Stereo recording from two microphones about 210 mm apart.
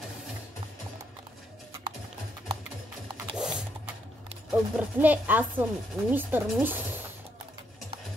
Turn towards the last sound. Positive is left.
turn(degrees=-10)  # may be behind; listen again after turning